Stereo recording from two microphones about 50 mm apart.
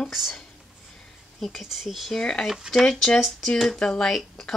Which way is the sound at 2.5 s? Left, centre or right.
Centre.